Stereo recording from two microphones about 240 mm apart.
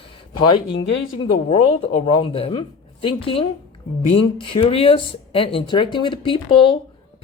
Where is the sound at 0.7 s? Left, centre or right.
Left.